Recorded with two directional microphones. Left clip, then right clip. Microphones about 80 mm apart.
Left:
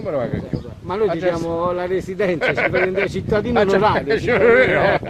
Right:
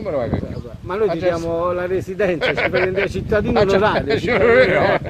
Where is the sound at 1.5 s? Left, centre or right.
Centre.